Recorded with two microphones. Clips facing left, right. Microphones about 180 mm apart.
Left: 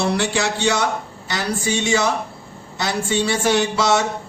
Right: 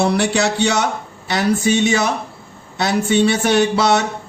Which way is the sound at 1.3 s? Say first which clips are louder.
Right 6 dB; 65° right (ahead or behind).